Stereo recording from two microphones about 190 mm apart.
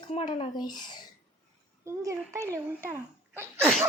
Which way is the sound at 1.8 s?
15° right (ahead or behind).